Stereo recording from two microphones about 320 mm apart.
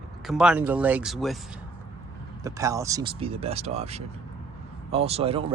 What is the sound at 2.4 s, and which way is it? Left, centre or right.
Speech, centre.